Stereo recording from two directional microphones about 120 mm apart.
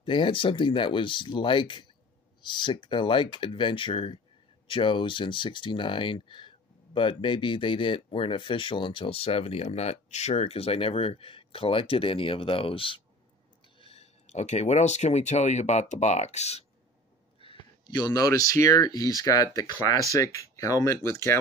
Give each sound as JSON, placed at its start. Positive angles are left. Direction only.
{"t": 0.0, "sound": "speech", "side_deg": 45}
{"t": 17.4, "sound": "a sound", "side_deg": 50}
{"t": 17.9, "sound": "speech", "side_deg": 30}